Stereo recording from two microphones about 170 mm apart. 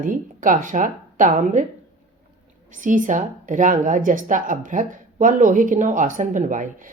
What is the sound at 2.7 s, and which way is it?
Speech, 50° right (ahead or behind).